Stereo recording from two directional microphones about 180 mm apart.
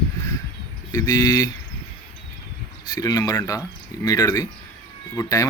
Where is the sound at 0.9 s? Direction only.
20° left (ahead or behind).